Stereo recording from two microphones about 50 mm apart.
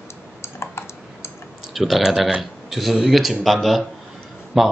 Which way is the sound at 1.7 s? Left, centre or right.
Centre.